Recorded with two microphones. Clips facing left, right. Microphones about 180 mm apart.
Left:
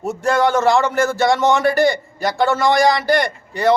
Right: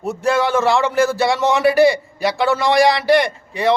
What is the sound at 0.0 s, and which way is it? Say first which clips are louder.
A man's voice: left 1 dB; centre (ahead or behind).